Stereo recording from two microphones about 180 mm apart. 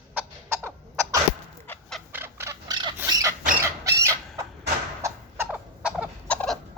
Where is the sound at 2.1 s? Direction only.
15° right (ahead or behind).